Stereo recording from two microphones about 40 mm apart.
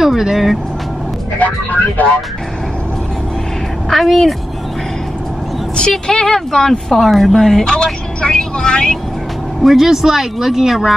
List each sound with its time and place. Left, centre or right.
0.0 s speech: centre
1.4 s speech: left
3.9 s a woman's voice: centre
5.8 s speech: centre
7.7 s speech: left
9.6 s speech: centre
9.8 s speech: centre